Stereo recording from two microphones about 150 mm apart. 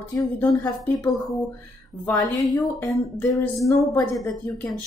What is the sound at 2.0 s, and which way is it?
A woman's voice, 20° left (ahead or behind).